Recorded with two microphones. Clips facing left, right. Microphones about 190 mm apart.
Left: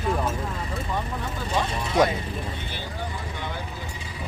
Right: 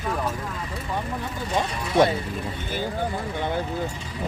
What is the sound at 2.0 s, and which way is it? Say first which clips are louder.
Speech: right 2 dB; 25° right (ahead or behind).